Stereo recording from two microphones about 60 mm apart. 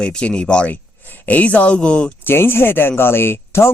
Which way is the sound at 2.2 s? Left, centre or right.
Left.